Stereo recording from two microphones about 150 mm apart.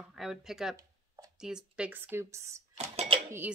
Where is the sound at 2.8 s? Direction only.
45° right (ahead or behind).